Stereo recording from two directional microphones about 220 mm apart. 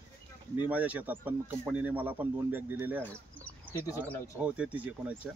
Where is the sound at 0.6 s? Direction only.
5° right (ahead or behind).